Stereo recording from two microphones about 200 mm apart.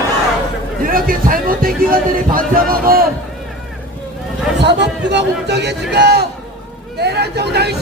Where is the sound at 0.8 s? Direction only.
45° right (ahead or behind).